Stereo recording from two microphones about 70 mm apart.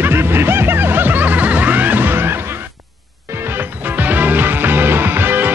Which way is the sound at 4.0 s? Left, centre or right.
Right.